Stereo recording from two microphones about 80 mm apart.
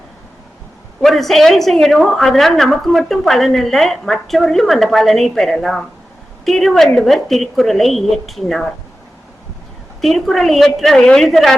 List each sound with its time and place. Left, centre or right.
1.0 s a woman's voice: centre
10.0 s a woman's voice: centre